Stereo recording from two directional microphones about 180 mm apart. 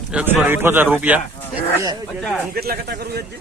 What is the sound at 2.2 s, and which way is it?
Speech, centre (ahead or behind).